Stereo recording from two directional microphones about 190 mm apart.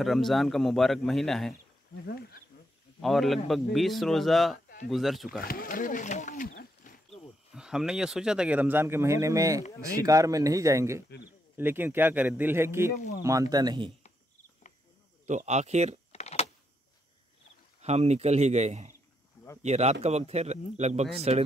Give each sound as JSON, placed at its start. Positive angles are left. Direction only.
{"t": 0.0, "sound": "a man's voice", "side_deg": 0}
{"t": 2.0, "sound": "speech", "side_deg": 55}
{"t": 3.0, "sound": "a man's voice", "side_deg": 0}
{"t": 5.4, "sound": "speech", "side_deg": 50}
{"t": 7.5, "sound": "speech", "side_deg": -5}
{"t": 12.9, "sound": "speech", "side_deg": 55}
{"t": 13.2, "sound": "speech", "side_deg": -15}
{"t": 15.2, "sound": "a man's voice", "side_deg": -35}
{"t": 16.1, "sound": "a sound", "side_deg": 35}
{"t": 17.8, "sound": "a man's voice", "side_deg": -35}